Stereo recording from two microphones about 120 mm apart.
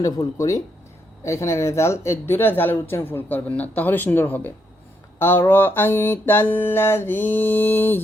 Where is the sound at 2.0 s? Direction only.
20° left (ahead or behind).